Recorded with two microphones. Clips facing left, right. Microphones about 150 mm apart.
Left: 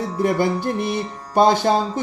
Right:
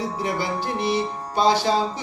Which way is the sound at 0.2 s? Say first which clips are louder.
Left 10 dB; 50° left (ahead or behind).